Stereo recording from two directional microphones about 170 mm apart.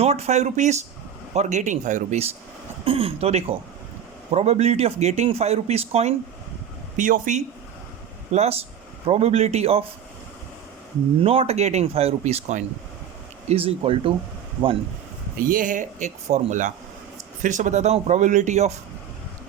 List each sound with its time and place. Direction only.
0.0 s speech: 40° right (ahead or behind)
6.9 s speech: 50° right (ahead or behind)
11.2 s speech: 35° right (ahead or behind)
15.4 s speech: 55° right (ahead or behind)